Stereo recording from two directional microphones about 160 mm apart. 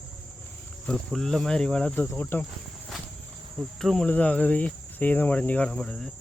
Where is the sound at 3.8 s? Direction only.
5° left (ahead or behind).